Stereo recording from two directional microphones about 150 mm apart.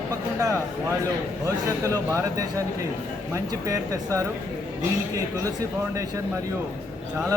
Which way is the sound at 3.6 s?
20° right (ahead or behind).